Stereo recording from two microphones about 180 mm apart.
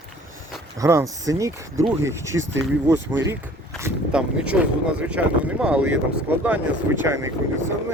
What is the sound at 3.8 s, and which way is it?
Speech, 5° right (ahead or behind).